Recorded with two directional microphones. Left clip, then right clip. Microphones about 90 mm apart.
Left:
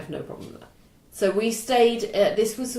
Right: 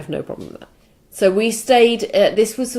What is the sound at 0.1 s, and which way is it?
A woman's voice, 35° right (ahead or behind).